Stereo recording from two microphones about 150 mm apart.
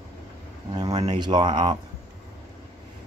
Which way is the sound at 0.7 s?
25° right (ahead or behind).